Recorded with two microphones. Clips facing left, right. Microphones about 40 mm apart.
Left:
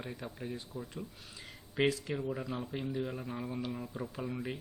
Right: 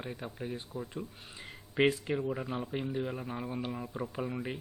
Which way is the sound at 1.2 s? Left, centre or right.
Right.